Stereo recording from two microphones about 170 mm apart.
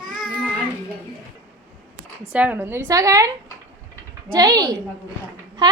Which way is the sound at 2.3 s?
10° right (ahead or behind).